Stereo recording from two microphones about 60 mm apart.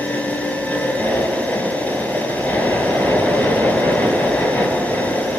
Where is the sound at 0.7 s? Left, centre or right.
Left.